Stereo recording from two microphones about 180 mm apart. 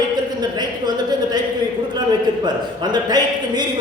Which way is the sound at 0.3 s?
25° right (ahead or behind).